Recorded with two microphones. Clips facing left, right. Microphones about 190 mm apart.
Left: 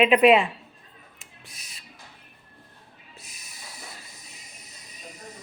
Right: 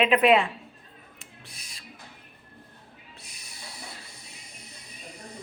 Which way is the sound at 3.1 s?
30° right (ahead or behind).